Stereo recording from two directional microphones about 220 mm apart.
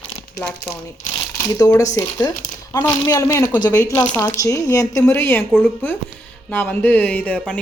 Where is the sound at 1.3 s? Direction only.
15° left (ahead or behind).